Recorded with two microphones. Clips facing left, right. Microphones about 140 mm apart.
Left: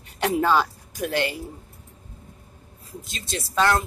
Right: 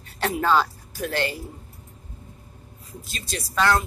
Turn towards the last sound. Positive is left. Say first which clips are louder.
# even
turn(degrees=20)  # may be behind; listen again after turning